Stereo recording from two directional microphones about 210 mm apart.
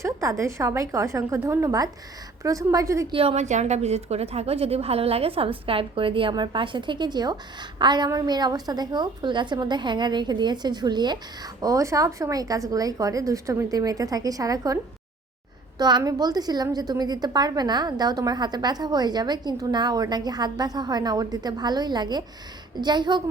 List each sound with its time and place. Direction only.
0.0 s speech: 15° right (ahead or behind)
3.2 s a woman's voice: 30° right (ahead or behind)
15.8 s a woman's voice: 20° right (ahead or behind)